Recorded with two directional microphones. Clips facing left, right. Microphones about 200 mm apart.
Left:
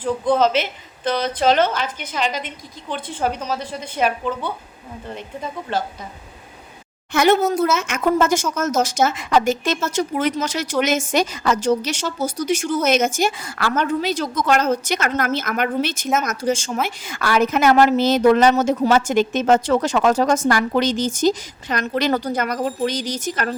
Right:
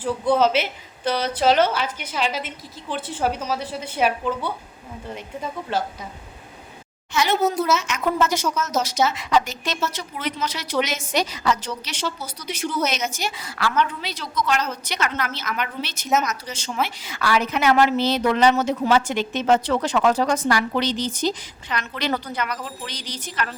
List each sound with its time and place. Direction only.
0.0 s a woman's voice: 10° right (ahead or behind)
7.1 s speech: 50° left (ahead or behind)